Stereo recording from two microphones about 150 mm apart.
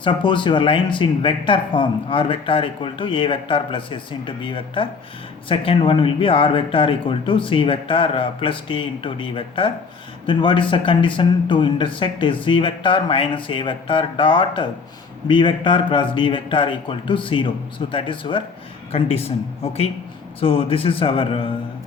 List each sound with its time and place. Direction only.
0.0 s speech: 35° left (ahead or behind)